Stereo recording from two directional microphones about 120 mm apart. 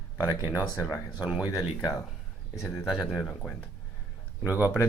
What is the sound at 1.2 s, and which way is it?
Speech, 10° right (ahead or behind).